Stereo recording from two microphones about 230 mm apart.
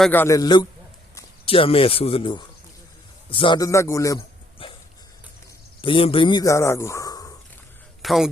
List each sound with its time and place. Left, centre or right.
0.0 s a man's voice: centre
4.6 s dog: left
5.8 s speech: left
8.0 s speech: centre